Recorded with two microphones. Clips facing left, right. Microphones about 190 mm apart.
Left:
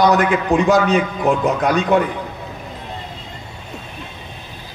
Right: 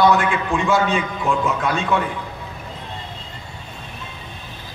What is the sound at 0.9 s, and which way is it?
A man's voice, 20° left (ahead or behind).